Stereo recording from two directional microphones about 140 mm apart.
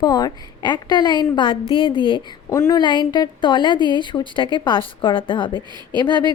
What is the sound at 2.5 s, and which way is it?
Speech, 20° left (ahead or behind).